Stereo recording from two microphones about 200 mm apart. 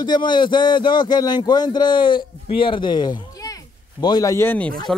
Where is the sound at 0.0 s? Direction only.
20° left (ahead or behind).